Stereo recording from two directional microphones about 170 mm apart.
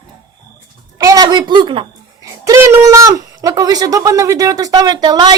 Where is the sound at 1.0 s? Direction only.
20° right (ahead or behind).